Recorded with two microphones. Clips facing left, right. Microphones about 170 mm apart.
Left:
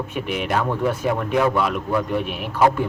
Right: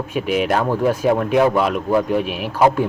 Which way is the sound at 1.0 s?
20° right (ahead or behind).